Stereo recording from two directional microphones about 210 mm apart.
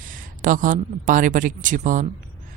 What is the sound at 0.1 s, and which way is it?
A woman's voice, 40° right (ahead or behind).